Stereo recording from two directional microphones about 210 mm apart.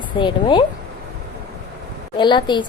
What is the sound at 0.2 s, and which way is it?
Speech, 20° left (ahead or behind).